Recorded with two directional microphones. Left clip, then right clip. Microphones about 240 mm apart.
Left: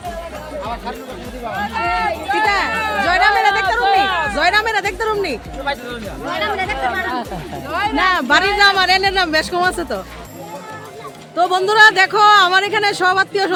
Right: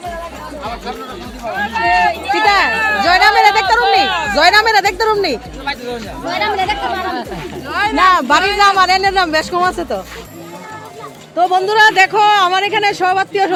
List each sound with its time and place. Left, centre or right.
1.8 s run: centre
2.3 s run: centre
2.6 s a sound: centre
3.0 s a sound: centre
4.0 s a sound: centre
4.4 s speech: centre
5.7 s speech: centre
6.2 s speech: centre
7.7 s a man's voice: centre
11.3 s a man's voice: centre